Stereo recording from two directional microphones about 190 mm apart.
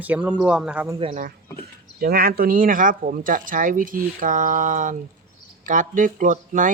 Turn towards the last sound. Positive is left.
turn(degrees=-45)  # may be behind; listen again after turning